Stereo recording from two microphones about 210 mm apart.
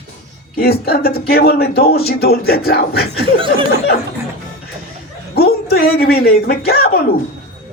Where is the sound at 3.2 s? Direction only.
25° right (ahead or behind).